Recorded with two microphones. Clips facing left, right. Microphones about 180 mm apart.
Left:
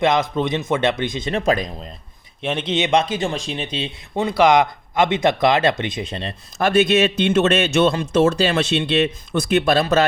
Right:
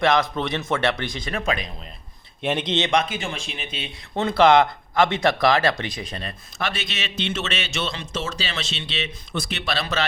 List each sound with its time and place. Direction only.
0.0 s speech: 20° left (ahead or behind)
1.5 s speech: 40° left (ahead or behind)
2.4 s speech: centre (ahead or behind)
2.9 s speech: 30° left (ahead or behind)
4.1 s speech: 10° left (ahead or behind)
6.6 s a man's voice: 50° left (ahead or behind)